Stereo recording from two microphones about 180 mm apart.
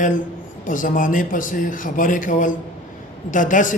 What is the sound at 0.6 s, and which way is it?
A man's voice, 45° left (ahead or behind).